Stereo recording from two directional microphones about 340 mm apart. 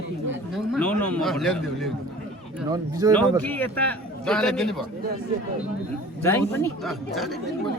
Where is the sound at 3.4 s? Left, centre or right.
Centre.